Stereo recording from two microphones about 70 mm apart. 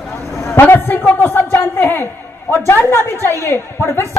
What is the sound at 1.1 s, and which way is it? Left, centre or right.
A man's voice, left.